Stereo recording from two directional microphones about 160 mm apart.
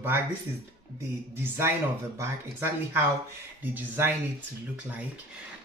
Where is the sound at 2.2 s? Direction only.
15° right (ahead or behind).